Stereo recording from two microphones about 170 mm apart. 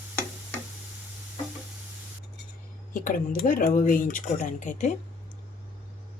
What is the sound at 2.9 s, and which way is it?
Speech, 55° left (ahead or behind).